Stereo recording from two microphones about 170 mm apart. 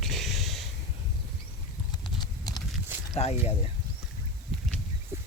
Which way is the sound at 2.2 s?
20° left (ahead or behind).